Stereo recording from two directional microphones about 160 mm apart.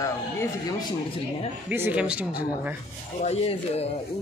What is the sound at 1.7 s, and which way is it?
Speech, 10° right (ahead or behind).